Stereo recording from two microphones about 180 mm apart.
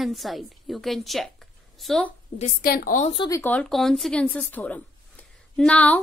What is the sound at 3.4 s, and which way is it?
A woman's voice, 5° left (ahead or behind).